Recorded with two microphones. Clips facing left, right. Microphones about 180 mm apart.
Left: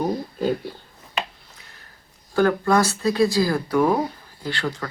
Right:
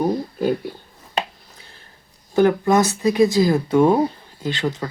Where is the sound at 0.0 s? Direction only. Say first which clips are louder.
Right 3 dB; 10° right (ahead or behind).